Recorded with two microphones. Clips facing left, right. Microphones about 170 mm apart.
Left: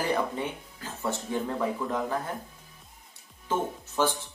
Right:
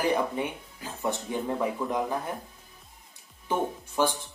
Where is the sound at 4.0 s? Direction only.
15° right (ahead or behind).